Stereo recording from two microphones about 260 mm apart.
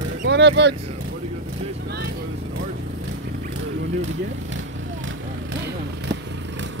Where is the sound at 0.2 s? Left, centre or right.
Right.